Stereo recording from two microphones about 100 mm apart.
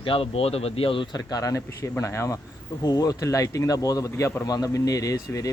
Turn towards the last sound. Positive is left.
turn(degrees=35)  # may be behind; listen again after turning